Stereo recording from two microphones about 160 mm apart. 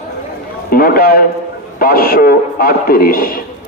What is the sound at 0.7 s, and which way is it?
A man's voice, 70° left (ahead or behind).